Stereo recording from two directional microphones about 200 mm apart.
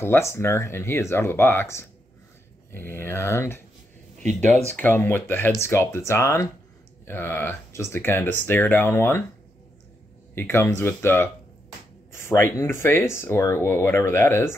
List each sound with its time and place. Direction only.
0.0 s speech: 15° left (ahead or behind)
4.3 s speech: 35° right (ahead or behind)
4.6 s speech: 10° left (ahead or behind)
10.3 s speech: 10° left (ahead or behind)